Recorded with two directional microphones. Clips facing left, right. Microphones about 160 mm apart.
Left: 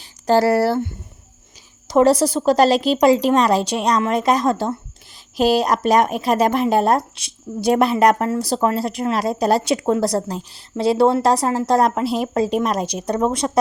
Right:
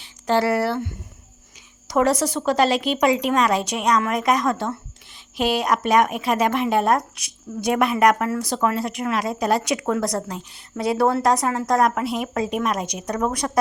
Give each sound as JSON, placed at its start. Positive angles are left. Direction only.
{"t": 0.0, "sound": "speech", "side_deg": 40}